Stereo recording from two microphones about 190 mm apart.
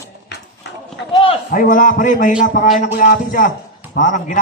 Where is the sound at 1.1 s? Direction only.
30° left (ahead or behind).